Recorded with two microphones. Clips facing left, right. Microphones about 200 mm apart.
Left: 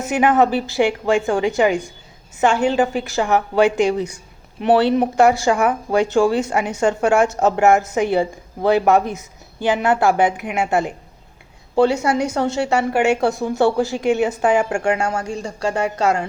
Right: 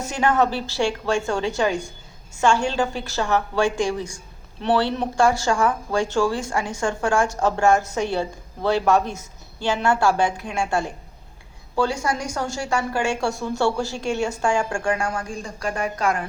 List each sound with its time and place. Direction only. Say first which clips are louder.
0.0 s a woman's voice: left 5 dB; 20° left (ahead or behind)
11.9 s a woman's voice: left 6 dB; 65° left (ahead or behind)
12.5 s a woman's voice: left 6 dB; 20° left (ahead or behind)